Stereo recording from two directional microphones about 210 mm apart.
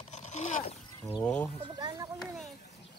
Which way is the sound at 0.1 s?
35° left (ahead or behind).